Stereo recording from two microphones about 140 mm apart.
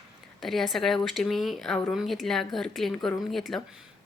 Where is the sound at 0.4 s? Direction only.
Centre (ahead or behind).